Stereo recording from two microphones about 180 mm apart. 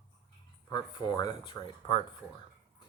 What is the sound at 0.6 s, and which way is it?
Speech, 20° left (ahead or behind).